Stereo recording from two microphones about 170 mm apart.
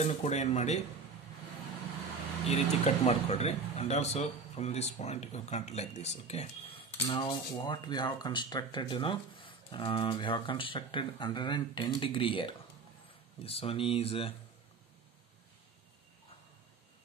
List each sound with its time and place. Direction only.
0.0 s speech: 40° left (ahead or behind)
2.4 s speech: 40° left (ahead or behind)